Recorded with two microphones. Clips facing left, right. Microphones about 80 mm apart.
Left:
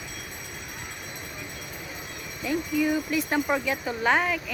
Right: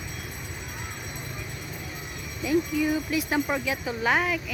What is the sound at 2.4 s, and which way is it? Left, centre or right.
Speech, centre.